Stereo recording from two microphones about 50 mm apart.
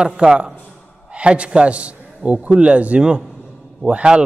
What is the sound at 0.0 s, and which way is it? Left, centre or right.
A man's voice, centre.